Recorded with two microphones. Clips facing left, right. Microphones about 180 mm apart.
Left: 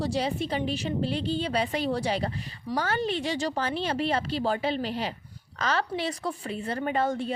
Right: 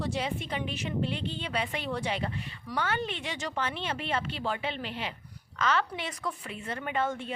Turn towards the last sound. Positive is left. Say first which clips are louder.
# left 4 dB
turn(degrees=35)  # may be behind; listen again after turning